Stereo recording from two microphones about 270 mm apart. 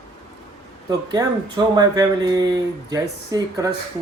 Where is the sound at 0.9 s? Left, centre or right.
Centre.